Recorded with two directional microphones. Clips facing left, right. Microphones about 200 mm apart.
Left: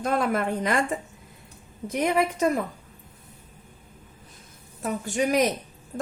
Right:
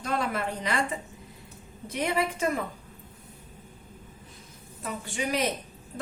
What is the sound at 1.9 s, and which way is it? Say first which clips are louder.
Speech: left 4 dB; 45° left (ahead or behind).